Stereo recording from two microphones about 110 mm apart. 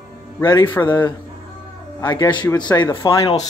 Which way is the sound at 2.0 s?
40° left (ahead or behind).